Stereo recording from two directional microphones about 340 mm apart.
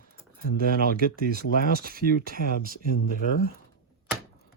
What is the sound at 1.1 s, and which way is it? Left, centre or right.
Speech, right.